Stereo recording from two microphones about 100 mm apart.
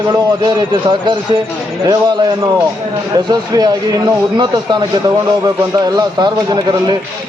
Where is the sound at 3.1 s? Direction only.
40° right (ahead or behind).